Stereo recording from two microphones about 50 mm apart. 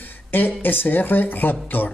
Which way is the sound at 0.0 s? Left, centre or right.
Left.